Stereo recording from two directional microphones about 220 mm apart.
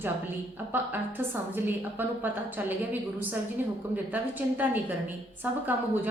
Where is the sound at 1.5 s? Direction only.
10° right (ahead or behind).